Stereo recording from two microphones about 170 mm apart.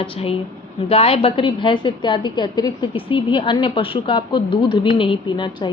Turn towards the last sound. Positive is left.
turn(degrees=25)  # may be behind; listen again after turning